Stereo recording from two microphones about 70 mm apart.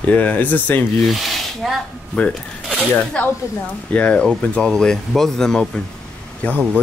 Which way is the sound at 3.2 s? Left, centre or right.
Centre.